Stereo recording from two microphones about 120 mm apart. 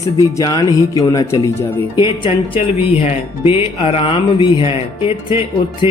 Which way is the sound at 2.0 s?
45° left (ahead or behind).